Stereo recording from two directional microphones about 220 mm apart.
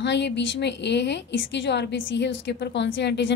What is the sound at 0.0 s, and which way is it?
A woman's voice, 50° left (ahead or behind).